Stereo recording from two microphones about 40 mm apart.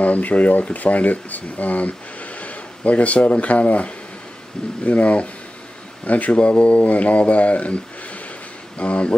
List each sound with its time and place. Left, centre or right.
0.0 s speech: left
6.3 s speech: left